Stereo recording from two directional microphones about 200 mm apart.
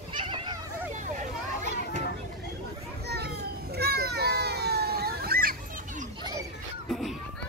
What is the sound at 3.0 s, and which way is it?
Children playing, 55° right (ahead or behind).